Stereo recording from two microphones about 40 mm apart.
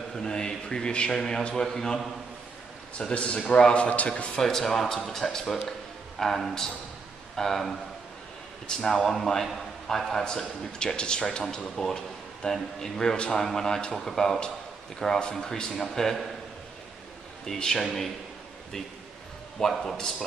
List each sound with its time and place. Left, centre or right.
0.1 s a man's voice: centre
3.2 s a man's voice: left
4.4 s a man's voice: centre
11.9 s a sound: centre
12.7 s a man's voice: centre
13.4 s a man's voice: centre
17.6 s a man's voice: centre
19.6 s a man's voice: centre